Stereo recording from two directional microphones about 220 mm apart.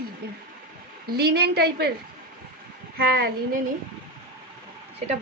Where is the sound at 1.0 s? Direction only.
50° right (ahead or behind).